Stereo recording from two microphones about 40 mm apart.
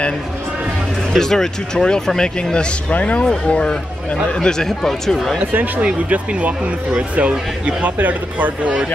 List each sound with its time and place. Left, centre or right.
1.1 s speech: centre
2.9 s speech: left; by 5.4 s centre
5.4 s speech: right
5.8 s speech: right